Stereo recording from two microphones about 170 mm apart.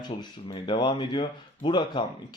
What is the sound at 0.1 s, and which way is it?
Speech, 30° left (ahead or behind).